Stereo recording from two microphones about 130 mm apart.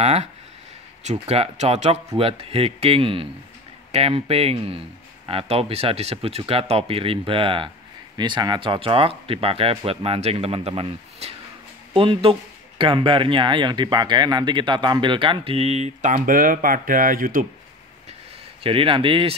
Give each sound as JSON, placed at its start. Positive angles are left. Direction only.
{"t": 0.0, "sound": "speech", "side_deg": -55}
{"t": 2.1, "sound": "speech", "side_deg": -50}
{"t": 18.6, "sound": "speech", "side_deg": -45}